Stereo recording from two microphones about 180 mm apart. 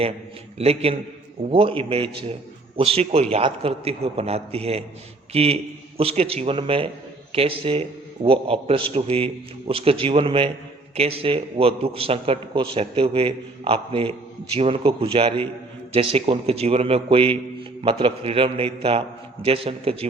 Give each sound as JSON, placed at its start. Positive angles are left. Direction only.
{"t": 0.6, "sound": "a man's voice", "side_deg": -35}